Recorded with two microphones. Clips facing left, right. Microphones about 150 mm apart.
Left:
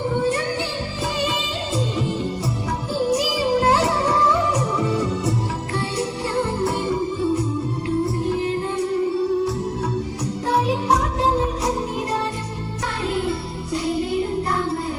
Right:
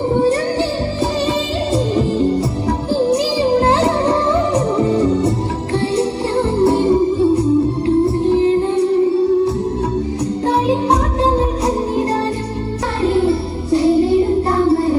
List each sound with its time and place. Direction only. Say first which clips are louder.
1.7 s music: right 7 dB; 35° right (ahead or behind)
10.4 s music: right 4 dB; 30° right (ahead or behind)